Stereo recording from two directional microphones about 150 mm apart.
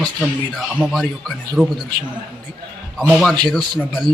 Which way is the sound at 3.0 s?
5° right (ahead or behind).